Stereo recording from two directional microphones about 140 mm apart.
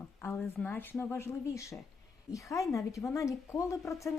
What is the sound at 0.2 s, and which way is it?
Speech, 15° left (ahead or behind).